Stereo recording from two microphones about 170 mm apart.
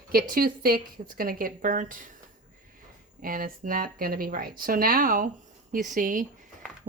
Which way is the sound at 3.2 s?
55° right (ahead or behind).